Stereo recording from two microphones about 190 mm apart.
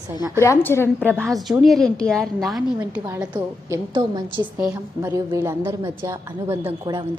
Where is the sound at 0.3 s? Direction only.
15° left (ahead or behind).